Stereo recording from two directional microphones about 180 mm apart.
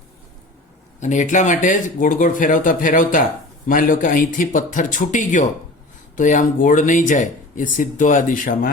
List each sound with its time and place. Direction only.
0.9 s speech: 45° left (ahead or behind)